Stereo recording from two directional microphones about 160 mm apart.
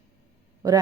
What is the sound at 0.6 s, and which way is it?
Speech, 20° right (ahead or behind).